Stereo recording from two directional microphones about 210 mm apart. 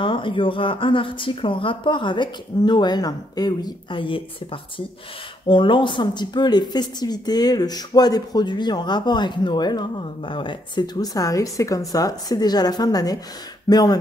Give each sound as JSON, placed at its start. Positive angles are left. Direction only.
{"t": 0.0, "sound": "speech", "side_deg": 25}